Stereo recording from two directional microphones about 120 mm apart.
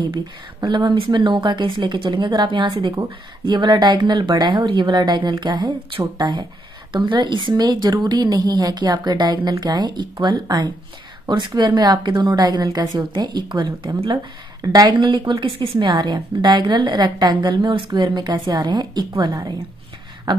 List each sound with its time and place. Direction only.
0.0 s a woman's voice: 40° right (ahead or behind)